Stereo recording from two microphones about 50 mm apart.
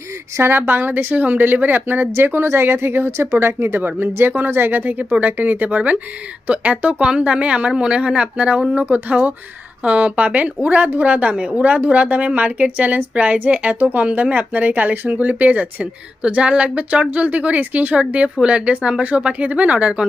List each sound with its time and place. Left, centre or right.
0.3 s a woman's voice: right